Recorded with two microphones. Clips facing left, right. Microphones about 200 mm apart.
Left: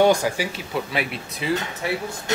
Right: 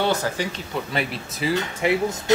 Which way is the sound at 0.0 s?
10° left (ahead or behind).